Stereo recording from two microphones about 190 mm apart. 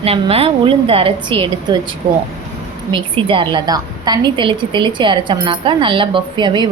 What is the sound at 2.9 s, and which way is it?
A woman's voice, 25° right (ahead or behind).